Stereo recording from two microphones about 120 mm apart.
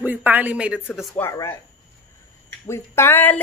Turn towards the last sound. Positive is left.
turn(degrees=15)  # may be behind; listen again after turning